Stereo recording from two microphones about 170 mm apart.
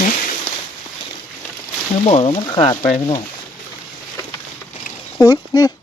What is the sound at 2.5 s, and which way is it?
Speech, 25° left (ahead or behind).